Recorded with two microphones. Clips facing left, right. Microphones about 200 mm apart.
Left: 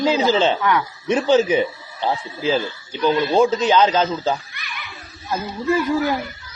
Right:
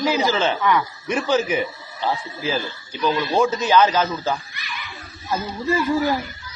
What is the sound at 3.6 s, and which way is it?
Speech, 25° left (ahead or behind).